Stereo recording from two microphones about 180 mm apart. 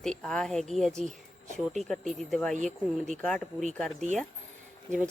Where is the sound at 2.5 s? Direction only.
45° right (ahead or behind).